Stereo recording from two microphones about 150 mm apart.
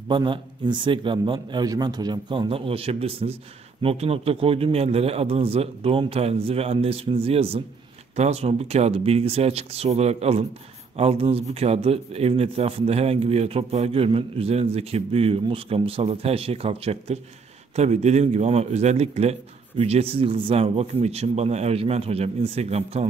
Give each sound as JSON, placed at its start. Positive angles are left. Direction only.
{"t": 0.1, "sound": "a man's voice", "side_deg": -30}